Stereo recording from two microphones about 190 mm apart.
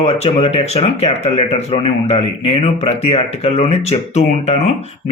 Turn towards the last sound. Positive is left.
turn(degrees=35)  # may be behind; listen again after turning